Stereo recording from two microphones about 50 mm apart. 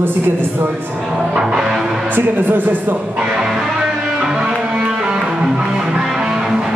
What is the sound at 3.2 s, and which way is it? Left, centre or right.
Music, centre.